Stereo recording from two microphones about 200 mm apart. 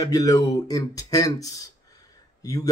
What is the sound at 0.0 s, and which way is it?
Speech, 20° left (ahead or behind).